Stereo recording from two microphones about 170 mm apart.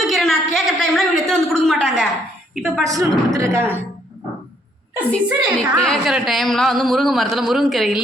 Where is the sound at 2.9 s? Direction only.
20° right (ahead or behind).